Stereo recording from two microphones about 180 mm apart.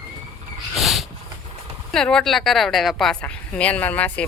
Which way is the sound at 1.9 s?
5° left (ahead or behind).